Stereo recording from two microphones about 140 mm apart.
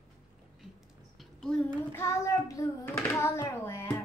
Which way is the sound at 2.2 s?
20° left (ahead or behind).